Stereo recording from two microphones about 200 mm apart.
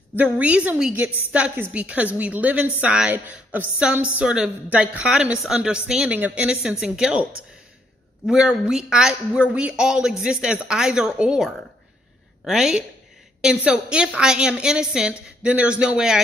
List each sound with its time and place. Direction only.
0.1 s a woman's voice: 10° right (ahead or behind)
8.3 s speech: 5° right (ahead or behind)